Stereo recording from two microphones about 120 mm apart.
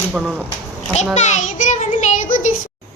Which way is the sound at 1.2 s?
85° left.